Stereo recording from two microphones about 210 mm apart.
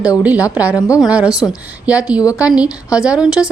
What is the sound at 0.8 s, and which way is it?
Speech, 15° left (ahead or behind).